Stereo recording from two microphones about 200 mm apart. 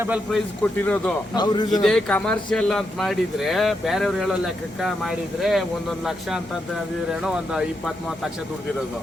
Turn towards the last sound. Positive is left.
turn(degrees=-5)  # may be behind; listen again after turning